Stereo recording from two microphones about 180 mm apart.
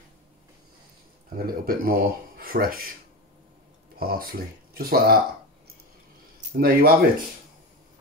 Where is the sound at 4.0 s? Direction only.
55° right (ahead or behind).